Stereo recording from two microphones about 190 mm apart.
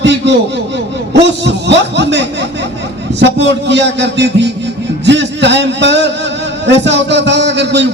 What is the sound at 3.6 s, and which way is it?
A man's voice, 65° right (ahead or behind).